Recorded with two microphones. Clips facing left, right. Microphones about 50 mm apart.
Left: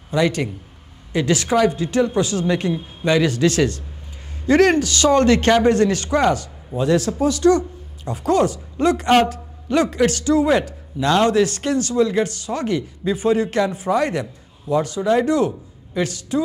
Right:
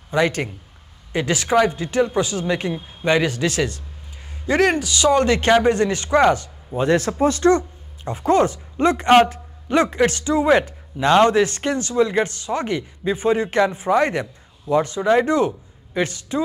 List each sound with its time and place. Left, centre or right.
0.1 s a man's voice: right